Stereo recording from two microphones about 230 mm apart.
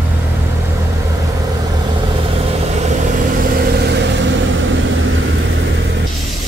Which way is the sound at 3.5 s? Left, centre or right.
Right.